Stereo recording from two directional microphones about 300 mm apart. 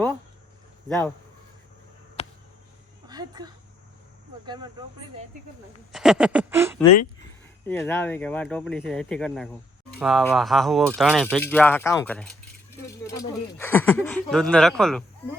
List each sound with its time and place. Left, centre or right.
0.9 s speech: centre
2.2 s a sound: left
3.1 s a sound: centre
4.4 s speech: centre
5.9 s speech: centre
7.7 s speech: centre